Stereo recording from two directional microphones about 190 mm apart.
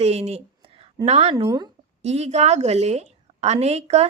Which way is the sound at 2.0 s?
35° right (ahead or behind).